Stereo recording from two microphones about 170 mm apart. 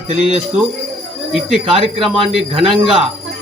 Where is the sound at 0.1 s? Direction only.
35° right (ahead or behind).